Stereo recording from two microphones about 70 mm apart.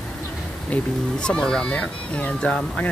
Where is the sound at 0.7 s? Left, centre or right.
Centre.